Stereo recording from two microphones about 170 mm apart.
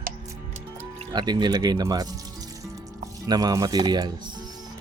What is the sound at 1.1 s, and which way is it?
Speech, 25° right (ahead or behind).